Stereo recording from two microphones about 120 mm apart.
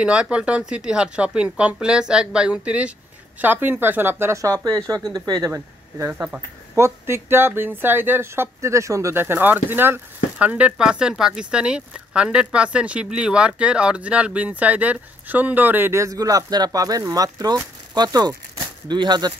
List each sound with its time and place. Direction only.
0.0 s speech: 10° right (ahead or behind); by 6.1 s 25° right (ahead or behind)
6.1 s speech: 10° right (ahead or behind); by 19.3 s 35° right (ahead or behind)